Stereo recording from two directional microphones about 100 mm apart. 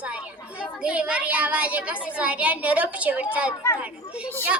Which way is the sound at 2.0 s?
15° right (ahead or behind).